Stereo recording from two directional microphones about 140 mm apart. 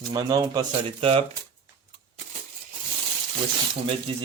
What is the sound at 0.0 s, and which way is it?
Speech, 30° right (ahead or behind).